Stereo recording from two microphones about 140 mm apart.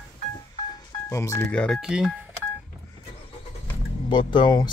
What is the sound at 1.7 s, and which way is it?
Speech, 5° right (ahead or behind).